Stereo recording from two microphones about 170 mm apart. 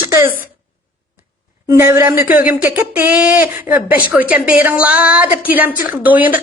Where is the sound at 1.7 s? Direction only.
15° right (ahead or behind).